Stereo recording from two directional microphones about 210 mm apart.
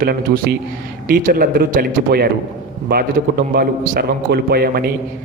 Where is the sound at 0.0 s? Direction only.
45° right (ahead or behind).